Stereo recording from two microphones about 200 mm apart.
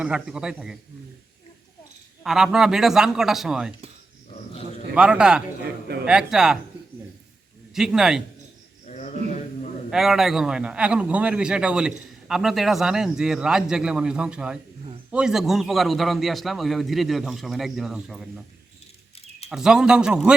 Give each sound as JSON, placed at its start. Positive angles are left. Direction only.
{"t": 0.0, "sound": "a man's voice", "side_deg": -5}
{"t": 2.2, "sound": "a man's voice", "side_deg": 0}
{"t": 4.9, "sound": "a man's voice", "side_deg": -5}
{"t": 7.7, "sound": "a man's voice", "side_deg": -5}
{"t": 8.9, "sound": "cricket", "side_deg": 35}
{"t": 9.9, "sound": "a man's voice", "side_deg": 0}
{"t": 19.5, "sound": "a man's voice", "side_deg": -5}